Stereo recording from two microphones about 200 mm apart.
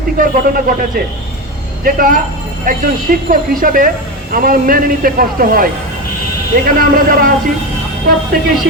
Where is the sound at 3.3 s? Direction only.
45° right (ahead or behind).